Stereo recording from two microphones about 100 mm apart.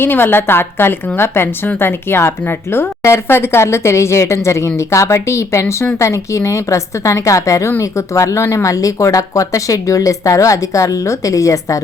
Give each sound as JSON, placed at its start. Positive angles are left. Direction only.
{"t": 0.0, "sound": "speech", "side_deg": 20}